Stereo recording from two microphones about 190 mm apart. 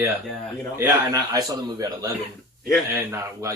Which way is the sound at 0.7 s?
15° right (ahead or behind).